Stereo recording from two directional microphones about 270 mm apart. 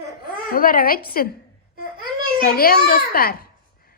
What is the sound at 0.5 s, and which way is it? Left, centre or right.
Speech, left.